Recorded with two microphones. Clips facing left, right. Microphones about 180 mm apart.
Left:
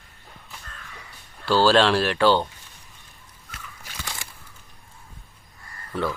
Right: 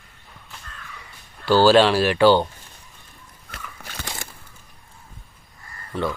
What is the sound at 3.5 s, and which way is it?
Biting, 60° right (ahead or behind).